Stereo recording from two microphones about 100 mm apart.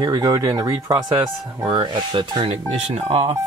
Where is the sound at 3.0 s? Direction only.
85° right.